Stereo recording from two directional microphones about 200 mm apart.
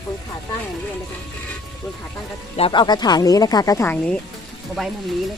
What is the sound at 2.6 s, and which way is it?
Speech, 25° left (ahead or behind).